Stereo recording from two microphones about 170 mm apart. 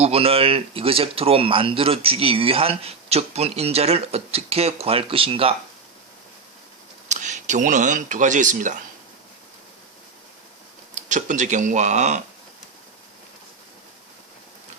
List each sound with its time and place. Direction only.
0.0 s speech: 35° right (ahead or behind)
7.1 s speech: 45° right (ahead or behind)
10.9 s speech: 50° right (ahead or behind)